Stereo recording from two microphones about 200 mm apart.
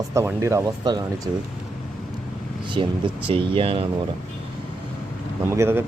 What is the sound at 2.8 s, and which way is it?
Speech, 25° right (ahead or behind).